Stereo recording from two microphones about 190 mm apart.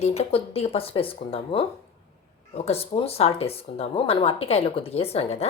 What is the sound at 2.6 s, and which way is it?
A woman's voice, 30° left (ahead or behind).